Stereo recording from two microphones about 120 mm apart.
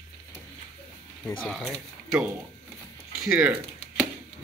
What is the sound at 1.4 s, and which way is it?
Speech, centre (ahead or behind).